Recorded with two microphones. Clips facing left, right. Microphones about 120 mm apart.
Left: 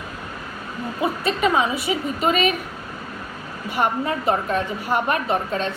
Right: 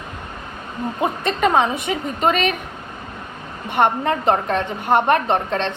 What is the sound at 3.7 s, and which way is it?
Speech, 55° right (ahead or behind).